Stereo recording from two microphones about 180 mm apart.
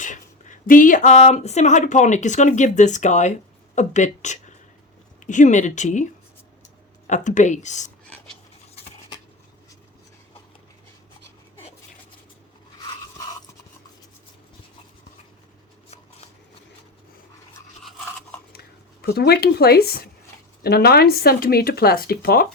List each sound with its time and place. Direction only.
0.0 s speech: 45° left (ahead or behind)
7.1 s speech: 45° left (ahead or behind)
17.8 s toothbrush: centre (ahead or behind)
19.0 s speech: 60° left (ahead or behind)